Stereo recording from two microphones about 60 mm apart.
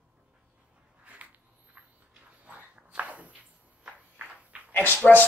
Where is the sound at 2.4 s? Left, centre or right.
Right.